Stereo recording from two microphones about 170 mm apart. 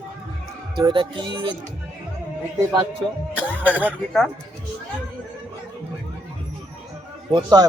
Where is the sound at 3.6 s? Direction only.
10° right (ahead or behind).